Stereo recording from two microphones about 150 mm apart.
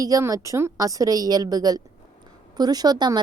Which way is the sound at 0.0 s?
20° right (ahead or behind).